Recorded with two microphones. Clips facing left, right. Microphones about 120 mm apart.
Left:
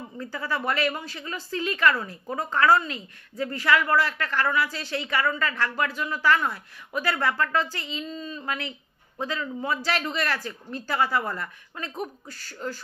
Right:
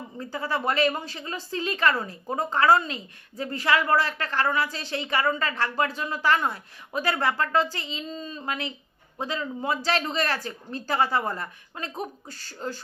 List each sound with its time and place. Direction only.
0.5 s speech: 25° right (ahead or behind)